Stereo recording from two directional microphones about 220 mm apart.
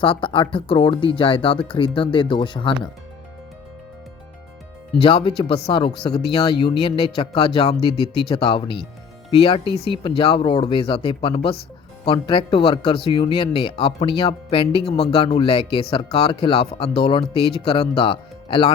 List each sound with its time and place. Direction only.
0.0 s speech: 25° left (ahead or behind)
5.0 s speech: 20° left (ahead or behind)